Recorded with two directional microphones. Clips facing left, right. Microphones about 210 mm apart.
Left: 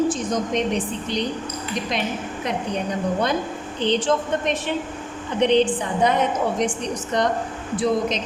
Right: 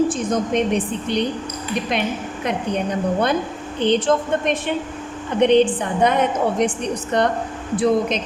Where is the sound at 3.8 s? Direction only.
55° right (ahead or behind).